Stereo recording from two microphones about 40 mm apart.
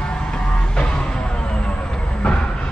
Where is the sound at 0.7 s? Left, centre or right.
Left.